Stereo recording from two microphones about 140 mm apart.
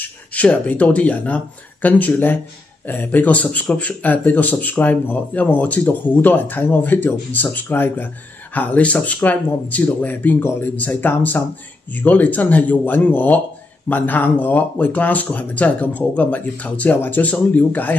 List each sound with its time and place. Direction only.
0.3 s a man's voice: 10° left (ahead or behind)